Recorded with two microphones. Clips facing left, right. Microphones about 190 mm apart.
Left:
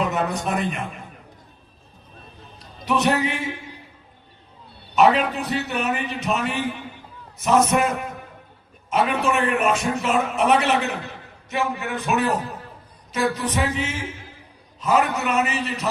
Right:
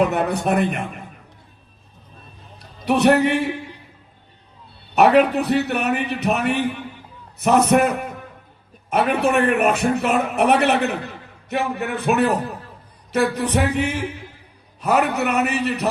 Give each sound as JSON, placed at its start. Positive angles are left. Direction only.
{"t": 0.0, "sound": "a man's voice", "side_deg": -60}
{"t": 2.8, "sound": "a man's voice", "side_deg": -60}
{"t": 4.9, "sound": "a man's voice", "side_deg": -65}